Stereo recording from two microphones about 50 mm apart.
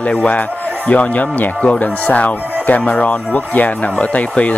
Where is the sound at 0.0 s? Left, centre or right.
Left.